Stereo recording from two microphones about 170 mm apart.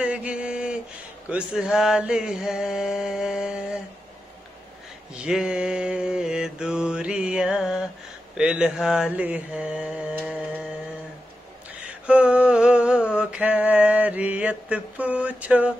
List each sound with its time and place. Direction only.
0.0 s a sound: 5° right (ahead or behind)
1.3 s mantra: 5° right (ahead or behind)
5.1 s mantra: 5° right (ahead or behind)
12.1 s mantra: 10° right (ahead or behind)